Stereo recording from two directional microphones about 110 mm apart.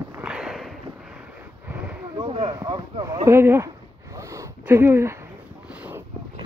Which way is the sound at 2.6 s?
35° right (ahead or behind).